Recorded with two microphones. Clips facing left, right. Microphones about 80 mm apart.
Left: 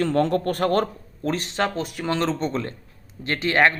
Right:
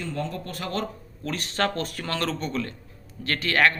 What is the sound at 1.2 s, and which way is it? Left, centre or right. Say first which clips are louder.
Speech: left 3 dB; left.